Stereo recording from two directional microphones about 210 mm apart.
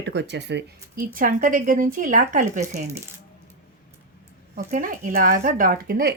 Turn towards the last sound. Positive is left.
turn(degrees=-45)  # may be behind; listen again after turning